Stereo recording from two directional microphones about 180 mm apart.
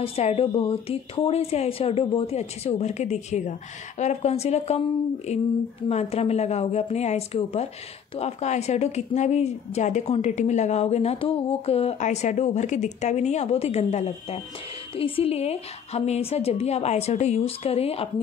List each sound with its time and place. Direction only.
0.0 s a woman's voice: 35° left (ahead or behind)